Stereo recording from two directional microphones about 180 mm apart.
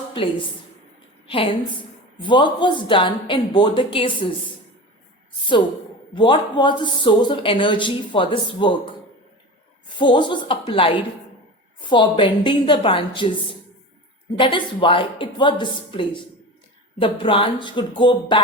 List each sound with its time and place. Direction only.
0.1 s a woman's voice: 25° left (ahead or behind)
6.1 s a man's voice: 25° left (ahead or behind)
10.0 s a man's voice: 25° left (ahead or behind)